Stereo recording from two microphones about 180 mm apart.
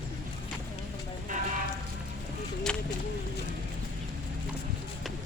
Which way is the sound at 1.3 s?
45° right (ahead or behind).